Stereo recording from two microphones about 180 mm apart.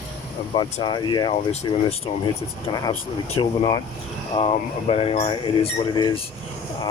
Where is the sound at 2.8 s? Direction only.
30° left (ahead or behind).